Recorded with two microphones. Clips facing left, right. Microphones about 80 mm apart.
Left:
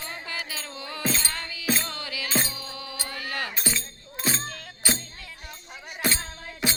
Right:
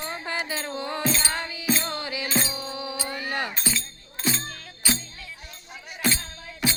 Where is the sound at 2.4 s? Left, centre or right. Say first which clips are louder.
Right 5 dB; right.